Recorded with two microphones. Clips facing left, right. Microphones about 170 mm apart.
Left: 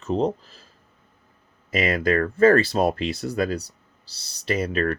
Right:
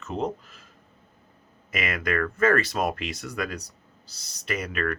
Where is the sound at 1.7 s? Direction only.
30° left (ahead or behind).